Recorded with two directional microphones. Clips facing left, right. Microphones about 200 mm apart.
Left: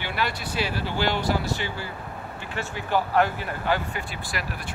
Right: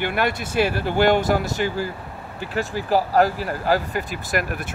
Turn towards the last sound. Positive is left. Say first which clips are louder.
# right 8 dB
turn(degrees=-40)  # may be behind; listen again after turning